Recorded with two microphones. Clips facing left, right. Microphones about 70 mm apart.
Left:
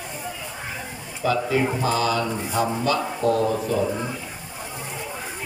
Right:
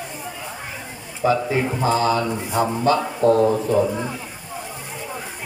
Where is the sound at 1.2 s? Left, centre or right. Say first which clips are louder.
Right 2 dB; right.